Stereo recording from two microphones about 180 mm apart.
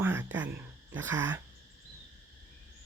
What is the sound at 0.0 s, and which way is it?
Speech, 10° right (ahead or behind).